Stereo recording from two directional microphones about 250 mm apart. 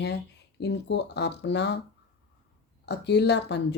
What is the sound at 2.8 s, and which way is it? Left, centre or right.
Speech, left.